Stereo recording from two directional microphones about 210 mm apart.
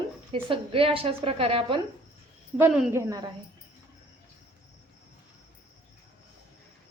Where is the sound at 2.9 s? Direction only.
15° right (ahead or behind).